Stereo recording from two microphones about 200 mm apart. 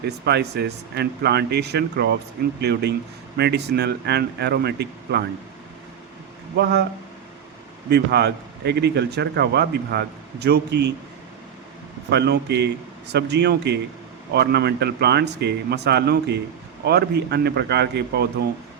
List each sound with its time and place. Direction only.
0.0 s speech: 55° right (ahead or behind)
6.6 s speech: 55° right (ahead or behind)
7.9 s speech: 55° right (ahead or behind)
12.1 s speech: 55° right (ahead or behind)